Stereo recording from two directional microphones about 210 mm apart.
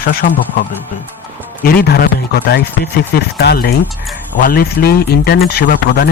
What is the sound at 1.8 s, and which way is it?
Speech, 50° left (ahead or behind).